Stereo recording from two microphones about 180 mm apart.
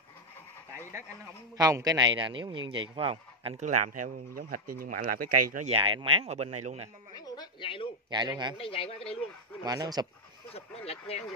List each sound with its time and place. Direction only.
1.6 s a man's voice: 20° right (ahead or behind); by 5.7 s 50° right (ahead or behind)
5.7 s speech: 30° right (ahead or behind)
7.2 s a sound: 25° left (ahead or behind)
8.1 s a man's voice: 25° right (ahead or behind)
8.5 s speech: 30° left (ahead or behind)
9.6 s a man's voice: 20° right (ahead or behind)
10.9 s speech: 35° left (ahead or behind)